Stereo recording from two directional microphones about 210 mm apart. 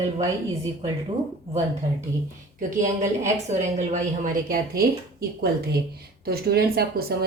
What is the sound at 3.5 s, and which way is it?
A woman's voice, 35° right (ahead or behind).